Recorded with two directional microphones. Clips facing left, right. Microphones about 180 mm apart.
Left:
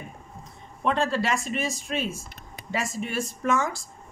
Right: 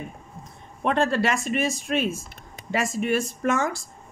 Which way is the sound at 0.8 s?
60° right (ahead or behind).